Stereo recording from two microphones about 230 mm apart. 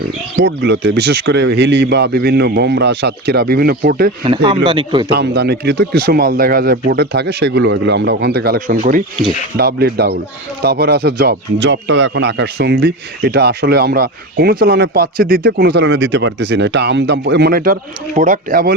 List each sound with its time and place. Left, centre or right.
0.3 s speech: right
4.2 s speech: right
5.1 s speech: right